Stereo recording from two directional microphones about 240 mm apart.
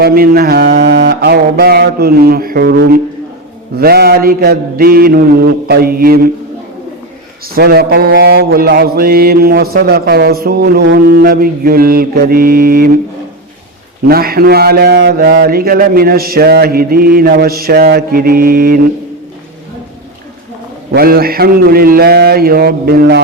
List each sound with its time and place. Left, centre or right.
0.0 s mantra: right
7.5 s mantra: right
14.1 s mantra: right
20.9 s mantra: right